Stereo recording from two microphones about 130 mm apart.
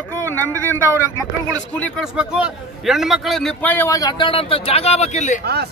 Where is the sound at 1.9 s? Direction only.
5° right (ahead or behind).